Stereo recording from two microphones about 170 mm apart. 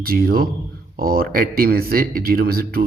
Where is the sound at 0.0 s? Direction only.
60° right (ahead or behind).